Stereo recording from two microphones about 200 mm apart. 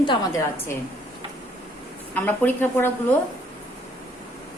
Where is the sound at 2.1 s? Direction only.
10° left (ahead or behind).